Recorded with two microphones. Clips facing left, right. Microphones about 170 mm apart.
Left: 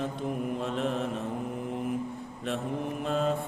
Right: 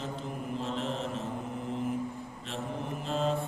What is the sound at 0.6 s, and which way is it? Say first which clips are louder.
Mantra: left 3 dB; 55° left (ahead or behind).